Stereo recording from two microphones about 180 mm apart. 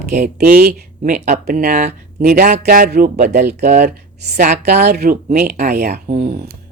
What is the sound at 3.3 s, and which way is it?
Speech, 40° right (ahead or behind).